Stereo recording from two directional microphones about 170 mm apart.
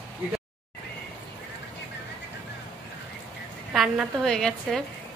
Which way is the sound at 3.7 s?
5° right (ahead or behind).